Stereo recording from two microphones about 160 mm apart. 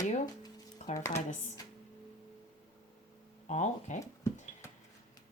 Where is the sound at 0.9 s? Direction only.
20° left (ahead or behind).